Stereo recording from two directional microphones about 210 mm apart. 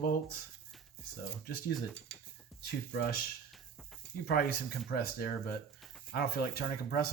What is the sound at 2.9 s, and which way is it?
Speech, 45° left (ahead or behind).